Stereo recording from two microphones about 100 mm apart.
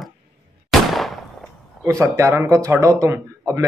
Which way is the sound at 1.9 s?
30° right (ahead or behind).